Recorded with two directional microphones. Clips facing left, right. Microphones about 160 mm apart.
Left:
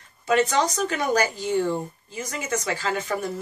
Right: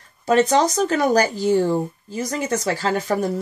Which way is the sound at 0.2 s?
35° right (ahead or behind).